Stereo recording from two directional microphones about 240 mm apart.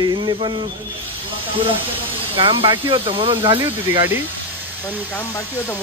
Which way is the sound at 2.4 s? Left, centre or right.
Right.